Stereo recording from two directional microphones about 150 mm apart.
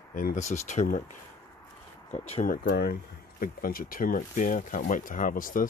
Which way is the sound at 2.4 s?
85° left.